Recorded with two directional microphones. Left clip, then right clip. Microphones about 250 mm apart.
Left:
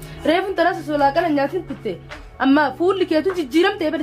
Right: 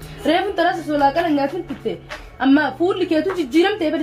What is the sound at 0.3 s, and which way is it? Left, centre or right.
A woman's voice, centre.